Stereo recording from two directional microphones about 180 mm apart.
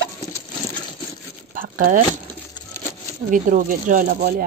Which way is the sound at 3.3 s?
45° right (ahead or behind).